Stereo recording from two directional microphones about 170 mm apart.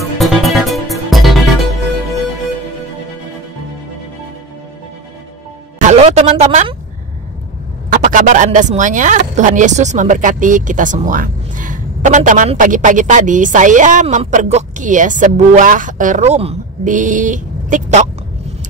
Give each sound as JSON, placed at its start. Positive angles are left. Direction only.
{"t": 0.0, "sound": "music", "side_deg": 0}
{"t": 5.9, "sound": "speech", "side_deg": -40}
{"t": 7.9, "sound": "speech", "side_deg": -50}
{"t": 14.0, "sound": "speech", "side_deg": -35}
{"t": 14.3, "sound": "speech", "side_deg": -50}